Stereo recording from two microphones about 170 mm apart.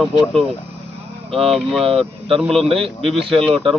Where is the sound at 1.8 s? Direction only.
35° right (ahead or behind).